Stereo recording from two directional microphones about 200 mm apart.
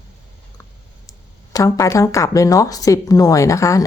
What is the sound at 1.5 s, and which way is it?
Speech, 15° left (ahead or behind).